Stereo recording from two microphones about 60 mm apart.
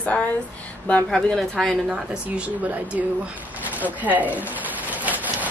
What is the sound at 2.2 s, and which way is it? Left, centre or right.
Speech, right.